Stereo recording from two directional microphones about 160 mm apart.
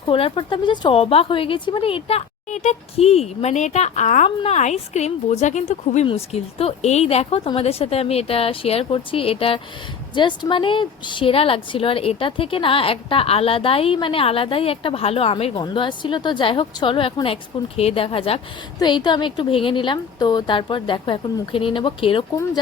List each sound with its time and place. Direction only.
0.1 s a woman's voice: 35° left (ahead or behind)